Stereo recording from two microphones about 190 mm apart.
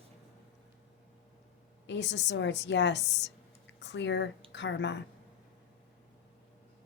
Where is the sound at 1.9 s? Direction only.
70° left (ahead or behind).